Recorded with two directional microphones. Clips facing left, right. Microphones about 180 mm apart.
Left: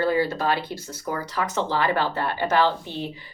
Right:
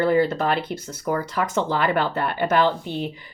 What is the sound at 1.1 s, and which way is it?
Speech, 50° right (ahead or behind).